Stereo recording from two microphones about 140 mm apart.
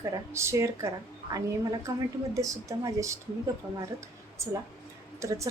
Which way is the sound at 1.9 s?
25° right (ahead or behind).